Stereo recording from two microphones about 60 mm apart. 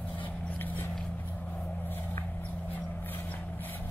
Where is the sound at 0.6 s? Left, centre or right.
Left.